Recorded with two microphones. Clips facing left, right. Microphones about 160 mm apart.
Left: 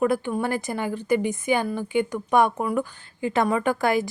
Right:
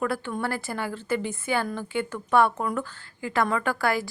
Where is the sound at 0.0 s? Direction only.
15° left (ahead or behind).